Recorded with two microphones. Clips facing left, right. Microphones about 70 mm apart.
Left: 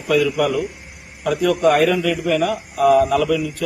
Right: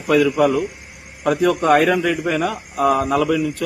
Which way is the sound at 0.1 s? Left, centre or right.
Right.